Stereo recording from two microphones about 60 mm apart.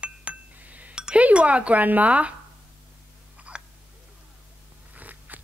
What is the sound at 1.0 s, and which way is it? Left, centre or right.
Chink, centre.